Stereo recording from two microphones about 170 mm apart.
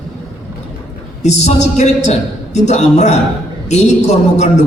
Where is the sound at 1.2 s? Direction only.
40° left (ahead or behind).